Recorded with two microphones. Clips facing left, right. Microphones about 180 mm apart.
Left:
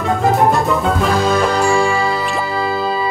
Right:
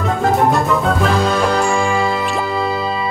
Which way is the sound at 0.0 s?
Centre (ahead or behind).